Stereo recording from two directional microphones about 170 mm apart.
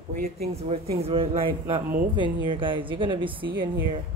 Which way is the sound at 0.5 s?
35° right (ahead or behind).